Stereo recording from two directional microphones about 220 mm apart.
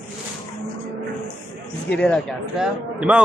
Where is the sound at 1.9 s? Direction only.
5° left (ahead or behind).